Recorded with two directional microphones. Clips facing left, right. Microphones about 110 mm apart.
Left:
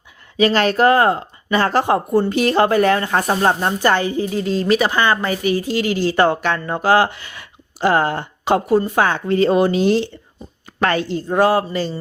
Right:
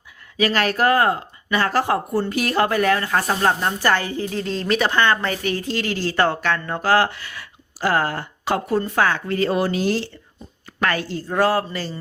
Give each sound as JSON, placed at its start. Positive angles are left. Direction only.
{"t": 0.3, "sound": "speech", "side_deg": 25}